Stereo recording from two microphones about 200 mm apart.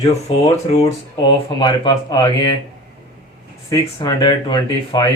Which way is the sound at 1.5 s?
20° left (ahead or behind).